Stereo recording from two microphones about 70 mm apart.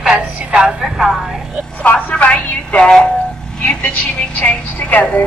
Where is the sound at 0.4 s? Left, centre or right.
Centre.